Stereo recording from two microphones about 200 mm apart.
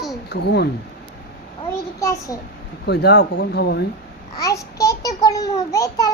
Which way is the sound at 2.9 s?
55° left (ahead or behind).